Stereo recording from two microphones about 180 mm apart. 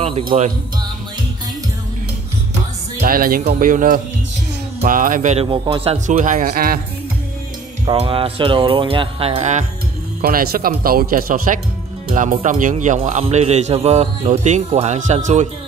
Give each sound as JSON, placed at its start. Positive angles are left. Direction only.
{"t": 3.0, "sound": "speech", "side_deg": -55}
{"t": 6.0, "sound": "speech", "side_deg": -45}
{"t": 7.8, "sound": "speech", "side_deg": -30}
{"t": 10.2, "sound": "speech", "side_deg": -55}